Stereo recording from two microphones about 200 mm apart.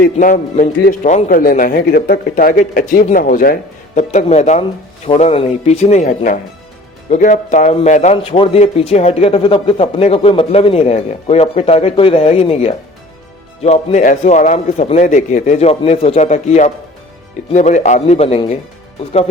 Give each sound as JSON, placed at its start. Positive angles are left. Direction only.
{"t": 0.2, "sound": "a man's voice", "side_deg": 40}